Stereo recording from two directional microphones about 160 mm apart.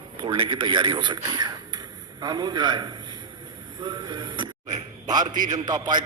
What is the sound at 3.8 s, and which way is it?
A man's voice, 25° right (ahead or behind).